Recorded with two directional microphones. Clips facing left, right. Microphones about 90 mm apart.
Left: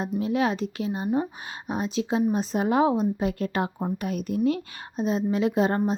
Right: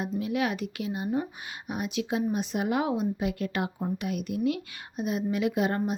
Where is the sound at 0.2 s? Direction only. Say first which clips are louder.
Left 5 dB; 30° left (ahead or behind).